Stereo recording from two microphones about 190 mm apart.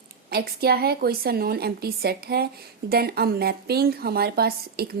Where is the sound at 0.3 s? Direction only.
55° right (ahead or behind).